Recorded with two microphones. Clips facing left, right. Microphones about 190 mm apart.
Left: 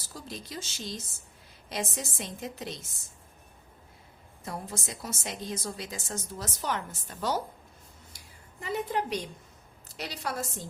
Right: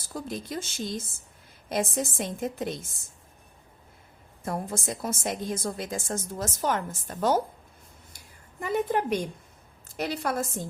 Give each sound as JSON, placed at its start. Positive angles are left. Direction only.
{"t": 0.1, "sound": "a woman's voice", "side_deg": -50}
{"t": 4.4, "sound": "a woman's voice", "side_deg": -50}
{"t": 8.6, "sound": "a woman's voice", "side_deg": -50}